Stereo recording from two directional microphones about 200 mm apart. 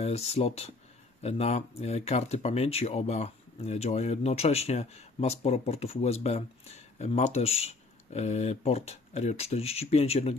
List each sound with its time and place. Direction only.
0.0 s speech: 30° left (ahead or behind)